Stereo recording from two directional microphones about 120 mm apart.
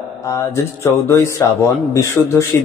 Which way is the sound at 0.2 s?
25° left (ahead or behind).